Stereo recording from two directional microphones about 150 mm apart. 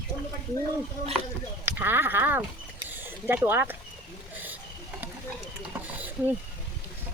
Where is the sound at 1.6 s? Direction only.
15° right (ahead or behind).